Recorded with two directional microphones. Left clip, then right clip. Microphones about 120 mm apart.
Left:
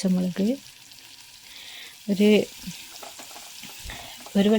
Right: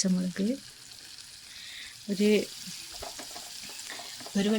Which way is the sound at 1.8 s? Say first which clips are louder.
Left 6 dB; 50° left (ahead or behind).